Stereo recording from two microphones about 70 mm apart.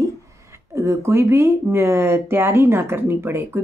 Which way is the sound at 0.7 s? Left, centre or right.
Right.